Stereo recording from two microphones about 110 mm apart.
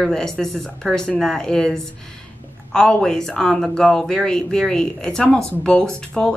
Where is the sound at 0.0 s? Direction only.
5° left (ahead or behind).